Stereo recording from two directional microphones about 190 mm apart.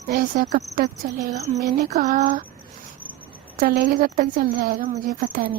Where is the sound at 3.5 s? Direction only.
50° right (ahead or behind).